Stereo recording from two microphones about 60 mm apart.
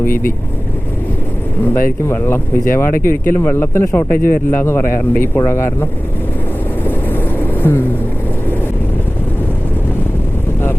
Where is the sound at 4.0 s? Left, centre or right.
Left.